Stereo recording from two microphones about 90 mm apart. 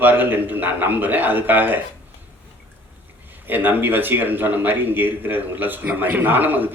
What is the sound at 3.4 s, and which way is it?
A man's voice, 20° right (ahead or behind).